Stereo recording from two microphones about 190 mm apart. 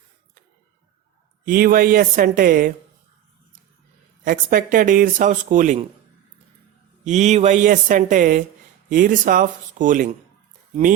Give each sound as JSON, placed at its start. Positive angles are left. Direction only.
{"t": 1.5, "sound": "speech", "side_deg": -50}
{"t": 4.2, "sound": "speech", "side_deg": -45}
{"t": 7.0, "sound": "speech", "side_deg": -40}